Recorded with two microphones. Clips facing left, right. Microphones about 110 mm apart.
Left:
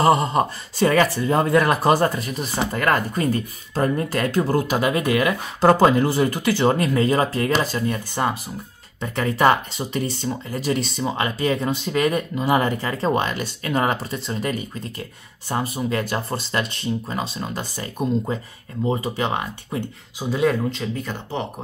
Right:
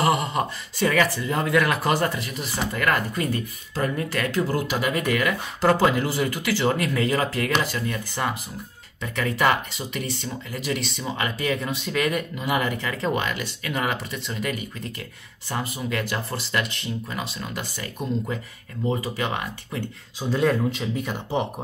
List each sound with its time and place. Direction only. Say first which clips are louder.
0.0 s speech: left 5 dB; 35° left (ahead or behind)
4.8 s speech: left 4 dB; 20° left (ahead or behind)
5.9 s speech: left 5 dB; 30° left (ahead or behind)
18.9 s speech: left 3 dB; 25° left (ahead or behind)
20.2 s speech: left 1 dB; 10° left (ahead or behind)
20.7 s speech: even; 10° right (ahead or behind)